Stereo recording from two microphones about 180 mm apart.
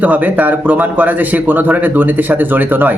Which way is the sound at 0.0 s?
10° right (ahead or behind).